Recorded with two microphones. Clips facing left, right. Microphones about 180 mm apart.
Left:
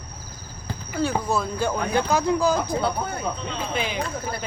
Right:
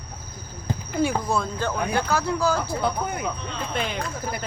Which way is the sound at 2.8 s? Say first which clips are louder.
Even; 15° right (ahead or behind).